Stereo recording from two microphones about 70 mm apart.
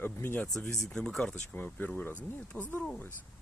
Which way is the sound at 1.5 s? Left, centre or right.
Left.